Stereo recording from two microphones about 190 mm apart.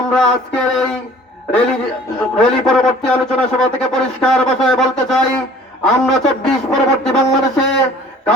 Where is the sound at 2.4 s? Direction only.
Centre (ahead or behind).